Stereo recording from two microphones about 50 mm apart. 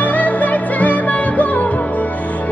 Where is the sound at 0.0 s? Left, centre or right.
Left.